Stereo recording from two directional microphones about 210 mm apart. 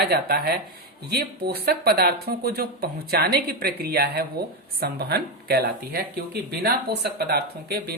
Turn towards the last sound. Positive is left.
turn(degrees=-50)  # may be behind; listen again after turning